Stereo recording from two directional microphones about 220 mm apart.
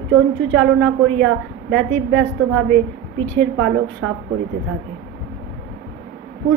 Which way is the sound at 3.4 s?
55° right (ahead or behind).